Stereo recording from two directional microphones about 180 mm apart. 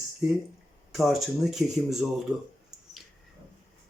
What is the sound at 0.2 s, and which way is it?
Speech, 5° right (ahead or behind).